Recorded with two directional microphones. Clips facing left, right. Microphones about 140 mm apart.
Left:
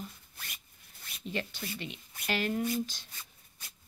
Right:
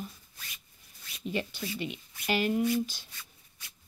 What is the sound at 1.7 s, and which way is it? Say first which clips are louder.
Speech: right 5 dB; 15° right (ahead or behind).